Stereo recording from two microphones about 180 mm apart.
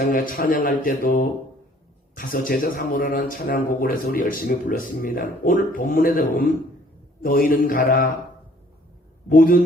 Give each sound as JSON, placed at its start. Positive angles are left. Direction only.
{"t": 0.0, "sound": "speech", "side_deg": 50}
{"t": 9.3, "sound": "speech", "side_deg": 50}